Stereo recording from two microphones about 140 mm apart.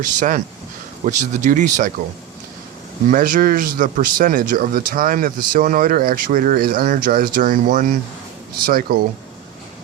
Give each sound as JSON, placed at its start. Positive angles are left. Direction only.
{"t": 0.0, "sound": "speech", "side_deg": -65}
{"t": 3.1, "sound": "speech", "side_deg": -70}
{"t": 8.6, "sound": "speech", "side_deg": -90}